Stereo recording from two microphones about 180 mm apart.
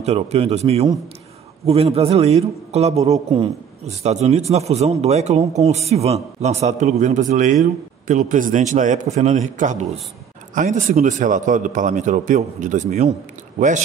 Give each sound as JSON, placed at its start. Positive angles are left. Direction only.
{"t": 0.0, "sound": "a man's voice", "side_deg": -35}